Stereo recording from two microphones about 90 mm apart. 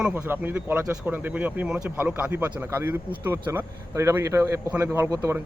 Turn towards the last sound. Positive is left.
turn(degrees=-35)  # may be behind; listen again after turning